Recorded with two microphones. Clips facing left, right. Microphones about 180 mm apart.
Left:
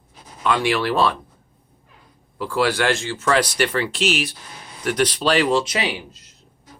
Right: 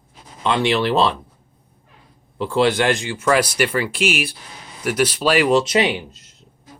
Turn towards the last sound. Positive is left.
turn(degrees=-25)  # may be behind; listen again after turning